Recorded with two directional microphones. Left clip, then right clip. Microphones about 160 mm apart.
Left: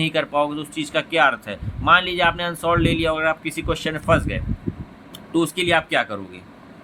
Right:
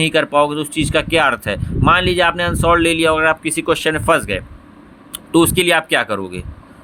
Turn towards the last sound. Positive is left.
turn(degrees=-65)  # may be behind; listen again after turning